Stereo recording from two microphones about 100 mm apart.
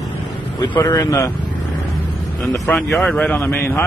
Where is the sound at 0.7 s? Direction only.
50° left (ahead or behind).